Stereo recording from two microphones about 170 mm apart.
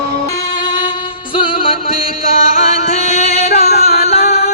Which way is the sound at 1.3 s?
30° left (ahead or behind).